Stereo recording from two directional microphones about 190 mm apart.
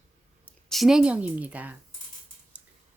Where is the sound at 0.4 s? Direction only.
Centre (ahead or behind).